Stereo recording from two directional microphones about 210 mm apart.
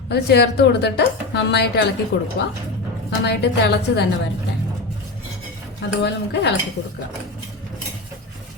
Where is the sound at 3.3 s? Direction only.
55° left (ahead or behind).